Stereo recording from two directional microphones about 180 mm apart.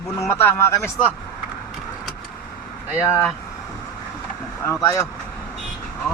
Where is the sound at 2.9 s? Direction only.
15° left (ahead or behind).